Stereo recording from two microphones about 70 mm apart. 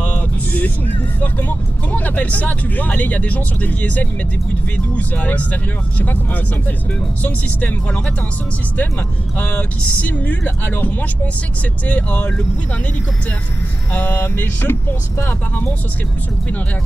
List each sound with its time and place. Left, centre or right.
0.0 s music: left
1.2 s speech: left
9.4 s speech: left
13.9 s speech: left